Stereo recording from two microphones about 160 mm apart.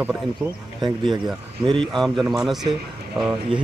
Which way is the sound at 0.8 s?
30° right (ahead or behind).